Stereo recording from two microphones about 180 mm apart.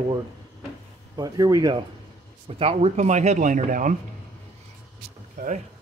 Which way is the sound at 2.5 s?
30° right (ahead or behind).